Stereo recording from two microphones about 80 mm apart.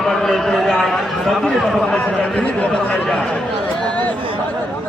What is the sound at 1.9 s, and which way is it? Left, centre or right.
Speech, centre.